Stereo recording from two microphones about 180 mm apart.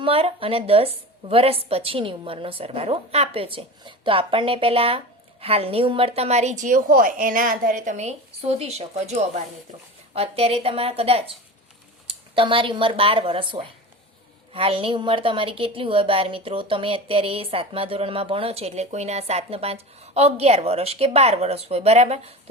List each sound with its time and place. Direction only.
0.0 s a woman's voice: 30° right (ahead or behind)